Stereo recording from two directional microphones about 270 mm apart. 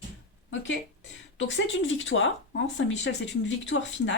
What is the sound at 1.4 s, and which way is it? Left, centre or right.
Speech, left.